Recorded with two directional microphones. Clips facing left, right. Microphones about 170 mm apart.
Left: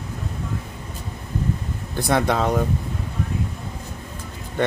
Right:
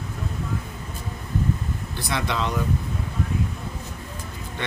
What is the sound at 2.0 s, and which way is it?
Speech, 50° left (ahead or behind).